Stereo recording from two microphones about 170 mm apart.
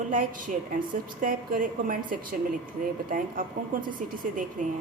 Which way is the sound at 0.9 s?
50° right (ahead or behind).